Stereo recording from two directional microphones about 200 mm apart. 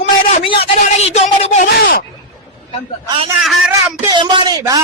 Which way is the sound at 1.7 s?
50° left (ahead or behind).